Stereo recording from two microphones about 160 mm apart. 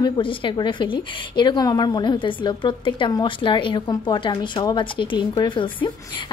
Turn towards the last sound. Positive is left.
turn(degrees=30)  # may be behind; listen again after turning